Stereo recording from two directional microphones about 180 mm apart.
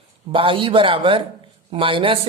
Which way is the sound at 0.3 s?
30° right (ahead or behind).